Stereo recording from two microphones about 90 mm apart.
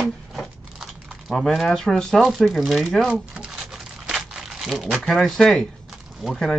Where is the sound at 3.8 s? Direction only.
5° right (ahead or behind).